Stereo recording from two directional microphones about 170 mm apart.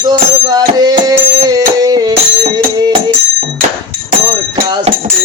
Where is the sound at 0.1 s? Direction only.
25° right (ahead or behind).